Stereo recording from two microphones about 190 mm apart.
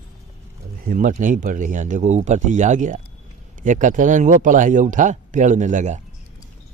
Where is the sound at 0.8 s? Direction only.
45° right (ahead or behind).